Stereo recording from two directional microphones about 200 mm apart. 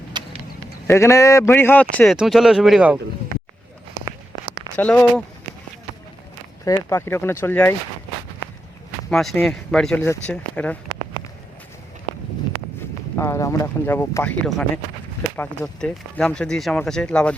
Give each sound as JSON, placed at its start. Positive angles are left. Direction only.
{"t": 0.1, "sound": "a sound", "side_deg": -20}
{"t": 0.9, "sound": "speech", "side_deg": 15}
{"t": 4.8, "sound": "speech", "side_deg": 5}
{"t": 6.7, "sound": "speech", "side_deg": 15}
{"t": 9.0, "sound": "speech", "side_deg": 5}
{"t": 13.1, "sound": "speech", "side_deg": 15}